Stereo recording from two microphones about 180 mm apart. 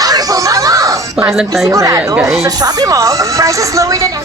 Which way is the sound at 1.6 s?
15° right (ahead or behind).